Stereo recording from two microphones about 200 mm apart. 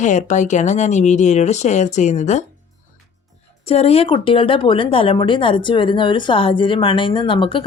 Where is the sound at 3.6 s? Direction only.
30° left (ahead or behind).